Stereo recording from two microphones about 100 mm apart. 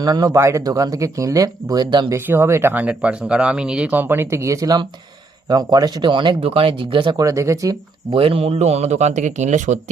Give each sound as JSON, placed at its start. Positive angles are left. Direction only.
{"t": 0.0, "sound": "speech", "side_deg": -40}
{"t": 2.0, "sound": "speech", "side_deg": -25}
{"t": 6.4, "sound": "speech", "side_deg": -65}
{"t": 7.2, "sound": "speech", "side_deg": -30}
{"t": 8.1, "sound": "a man's voice", "side_deg": -70}